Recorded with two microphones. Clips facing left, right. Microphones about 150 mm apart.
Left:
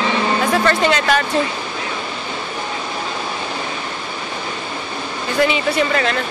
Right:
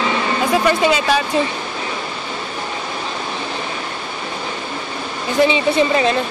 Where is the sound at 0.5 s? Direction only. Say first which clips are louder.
Right 3 dB; 10° right (ahead or behind).